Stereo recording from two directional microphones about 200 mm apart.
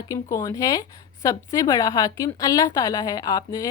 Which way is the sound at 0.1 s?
15° left (ahead or behind).